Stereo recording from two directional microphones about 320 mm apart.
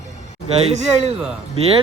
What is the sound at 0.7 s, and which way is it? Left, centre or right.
Speech, centre.